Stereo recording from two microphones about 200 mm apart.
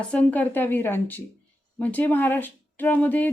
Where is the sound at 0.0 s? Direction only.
5° left (ahead or behind).